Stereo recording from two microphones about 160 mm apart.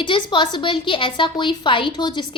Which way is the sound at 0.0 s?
30° left (ahead or behind).